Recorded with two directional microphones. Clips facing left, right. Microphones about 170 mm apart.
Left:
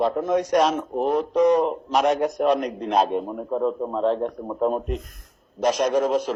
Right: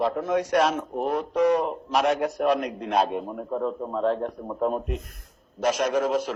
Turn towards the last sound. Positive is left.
turn(degrees=35)  # may be behind; listen again after turning